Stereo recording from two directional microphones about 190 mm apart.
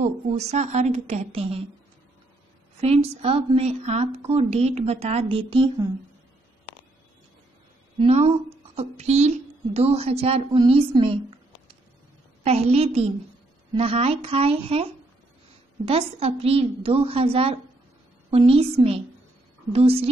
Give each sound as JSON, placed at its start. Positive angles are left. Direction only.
{"t": 0.0, "sound": "a woman's voice", "side_deg": -35}
{"t": 2.8, "sound": "a woman's voice", "side_deg": -30}
{"t": 8.0, "sound": "a woman's voice", "side_deg": -35}
{"t": 12.4, "sound": "a woman's voice", "side_deg": -35}